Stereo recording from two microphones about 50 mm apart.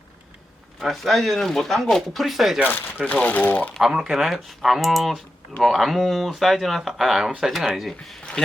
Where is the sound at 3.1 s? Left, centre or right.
Left.